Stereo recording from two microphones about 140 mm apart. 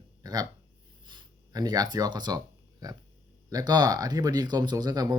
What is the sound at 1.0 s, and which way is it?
Speech, 30° right (ahead or behind).